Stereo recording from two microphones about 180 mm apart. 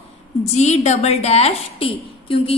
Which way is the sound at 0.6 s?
40° left (ahead or behind).